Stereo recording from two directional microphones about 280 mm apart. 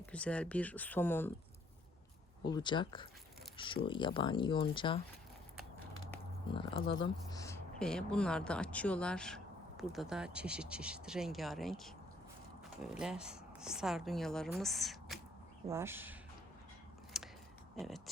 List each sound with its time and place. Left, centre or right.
0.0 s a woman's voice: centre
2.5 s speech: centre
6.1 s a woman's voice: centre
17.2 s a sound: centre
17.7 s a woman's voice: centre